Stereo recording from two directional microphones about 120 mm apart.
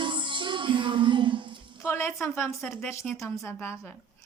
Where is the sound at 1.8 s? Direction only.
20° left (ahead or behind).